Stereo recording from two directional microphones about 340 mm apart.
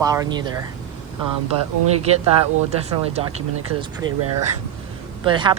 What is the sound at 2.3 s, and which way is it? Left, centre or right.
Speech, centre.